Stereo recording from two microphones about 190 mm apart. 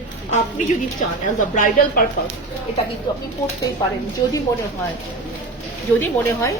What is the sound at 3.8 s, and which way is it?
Speech, 20° left (ahead or behind).